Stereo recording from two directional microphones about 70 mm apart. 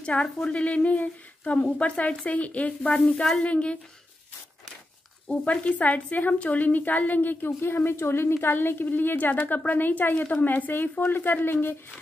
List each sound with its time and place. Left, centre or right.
0.0 s speech: centre
5.3 s a woman's voice: centre